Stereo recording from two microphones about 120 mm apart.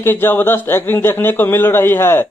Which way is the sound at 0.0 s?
20° left (ahead or behind).